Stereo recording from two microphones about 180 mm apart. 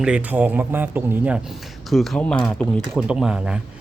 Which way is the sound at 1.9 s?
Centre (ahead or behind).